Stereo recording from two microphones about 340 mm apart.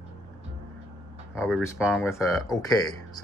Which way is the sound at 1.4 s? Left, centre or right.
Centre.